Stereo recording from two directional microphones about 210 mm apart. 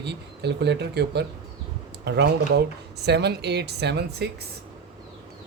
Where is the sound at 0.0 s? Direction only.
55° right (ahead or behind).